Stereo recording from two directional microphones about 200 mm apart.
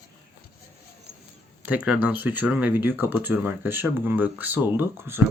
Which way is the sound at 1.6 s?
5° right (ahead or behind).